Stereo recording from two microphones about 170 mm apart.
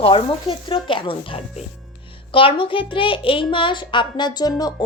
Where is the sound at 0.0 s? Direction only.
35° left (ahead or behind).